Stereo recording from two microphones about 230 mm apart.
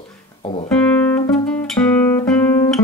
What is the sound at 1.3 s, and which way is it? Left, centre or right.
Music, centre.